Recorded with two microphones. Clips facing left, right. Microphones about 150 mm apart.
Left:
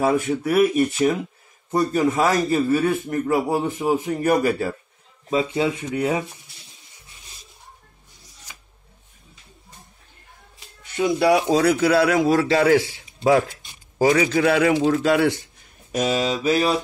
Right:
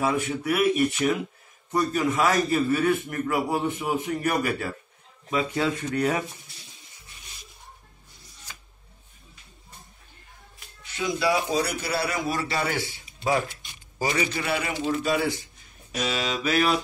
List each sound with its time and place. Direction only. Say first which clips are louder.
0.0 s a man's voice: left 5 dB; 40° left (ahead or behind)
5.3 s speech: left 4 dB; 20° left (ahead or behind)
11.0 s a man's voice: left 7 dB; 65° left (ahead or behind)
15.9 s a man's voice: left 7 dB; 40° left (ahead or behind)
16.5 s music: even; 30° left (ahead or behind)